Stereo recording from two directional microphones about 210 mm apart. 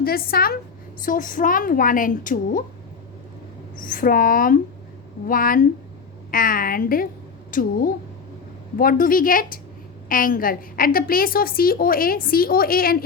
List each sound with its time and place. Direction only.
0.0 s a woman's voice: 45° left (ahead or behind)
3.8 s a woman's voice: 40° left (ahead or behind)